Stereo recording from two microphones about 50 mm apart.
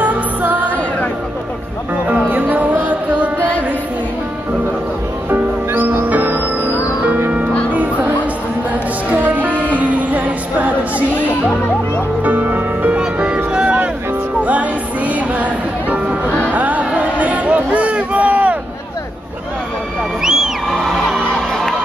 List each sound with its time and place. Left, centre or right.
0.0 s music: right
2.2 s music: right
3.3 s music: left
5.3 s music: right
9.1 s music: right
12.2 s music: right
13.0 s music: right
16.5 s a sound: right
20.2 s music: centre